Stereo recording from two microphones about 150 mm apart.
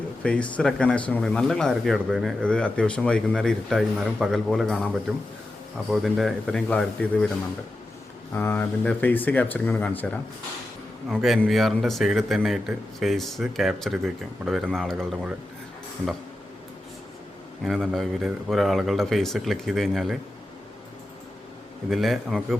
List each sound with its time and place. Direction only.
0.2 s speech: 5° left (ahead or behind)
8.4 s speech: 15° left (ahead or behind)
17.7 s speech: centre (ahead or behind)
21.8 s speech: centre (ahead or behind)